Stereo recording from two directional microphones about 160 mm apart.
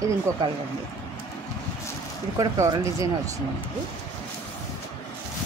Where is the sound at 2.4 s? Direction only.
20° right (ahead or behind).